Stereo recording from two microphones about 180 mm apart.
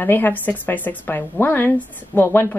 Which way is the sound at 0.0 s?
10° left (ahead or behind).